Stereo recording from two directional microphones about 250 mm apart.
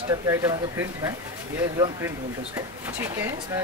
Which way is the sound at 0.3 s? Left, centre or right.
Centre.